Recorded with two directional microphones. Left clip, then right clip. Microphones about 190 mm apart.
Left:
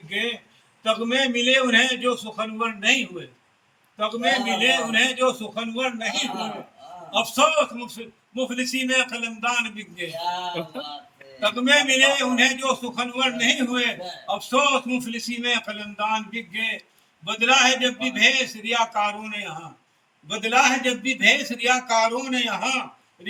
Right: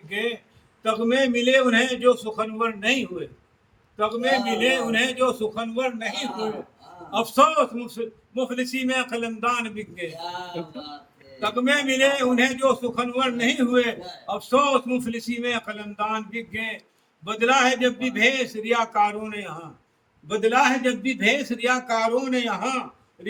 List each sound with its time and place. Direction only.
0.1 s a man's voice: 5° right (ahead or behind)
11.3 s a man's voice: 15° right (ahead or behind)